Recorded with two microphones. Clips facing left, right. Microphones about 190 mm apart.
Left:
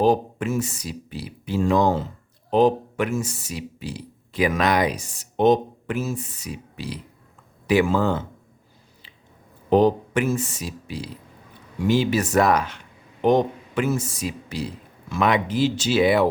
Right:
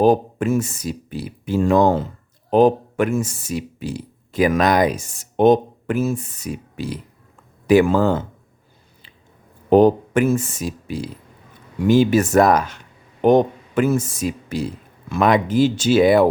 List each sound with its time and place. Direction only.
0.0 s speech: 50° right (ahead or behind)
9.6 s speech: 50° right (ahead or behind)